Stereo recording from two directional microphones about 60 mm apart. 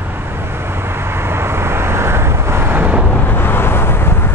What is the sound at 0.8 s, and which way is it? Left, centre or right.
Vehicle, right.